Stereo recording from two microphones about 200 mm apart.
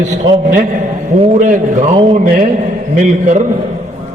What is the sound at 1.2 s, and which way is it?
A man's voice, 35° right (ahead or behind).